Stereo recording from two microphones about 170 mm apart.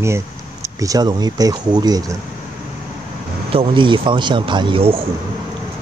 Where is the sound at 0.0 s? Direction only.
15° right (ahead or behind).